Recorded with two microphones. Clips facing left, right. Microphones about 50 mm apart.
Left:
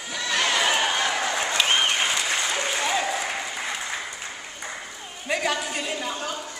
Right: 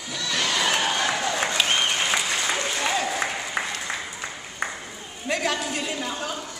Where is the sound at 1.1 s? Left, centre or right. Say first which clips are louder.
Even; centre.